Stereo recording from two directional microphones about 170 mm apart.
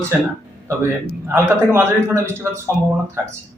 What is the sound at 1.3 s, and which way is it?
Speech, 15° right (ahead or behind).